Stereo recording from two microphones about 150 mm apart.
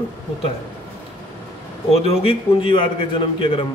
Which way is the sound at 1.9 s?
40° left (ahead or behind).